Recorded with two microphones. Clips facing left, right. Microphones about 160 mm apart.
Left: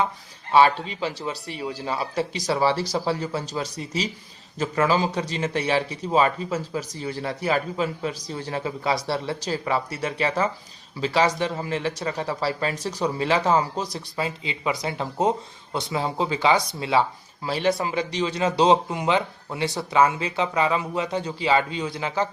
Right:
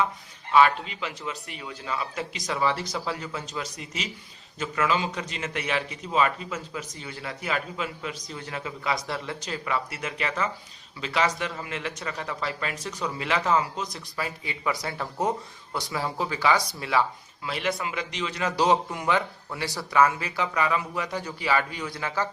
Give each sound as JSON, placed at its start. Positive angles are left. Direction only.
{"t": 0.5, "sound": "a man's voice", "side_deg": 30}